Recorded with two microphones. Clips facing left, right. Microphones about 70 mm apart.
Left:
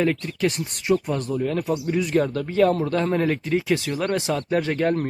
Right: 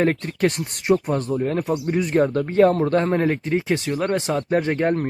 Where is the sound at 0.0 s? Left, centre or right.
Right.